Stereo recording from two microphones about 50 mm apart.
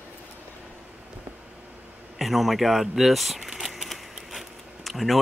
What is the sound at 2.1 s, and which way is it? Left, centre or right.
Speech, centre.